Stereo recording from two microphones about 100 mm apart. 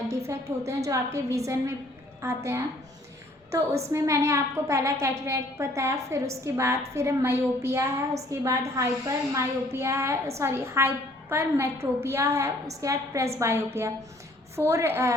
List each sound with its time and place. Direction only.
0.1 s a woman's voice: 30° right (ahead or behind)
3.9 s a woman's voice: 30° right (ahead or behind)